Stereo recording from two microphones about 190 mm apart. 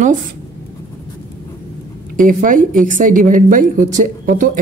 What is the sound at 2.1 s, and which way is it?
A woman's voice, 45° right (ahead or behind).